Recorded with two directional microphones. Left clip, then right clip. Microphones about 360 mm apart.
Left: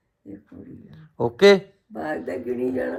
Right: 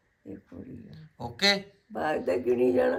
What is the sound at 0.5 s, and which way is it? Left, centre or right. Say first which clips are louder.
Mantra: left 1 dB; centre.